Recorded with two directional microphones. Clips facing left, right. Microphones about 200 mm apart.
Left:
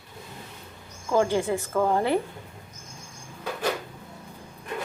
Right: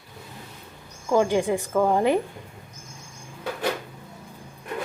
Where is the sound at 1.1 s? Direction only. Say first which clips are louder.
Right 2 dB; 15° right (ahead or behind).